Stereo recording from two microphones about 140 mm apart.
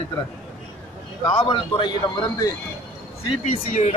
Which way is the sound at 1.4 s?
35° left (ahead or behind).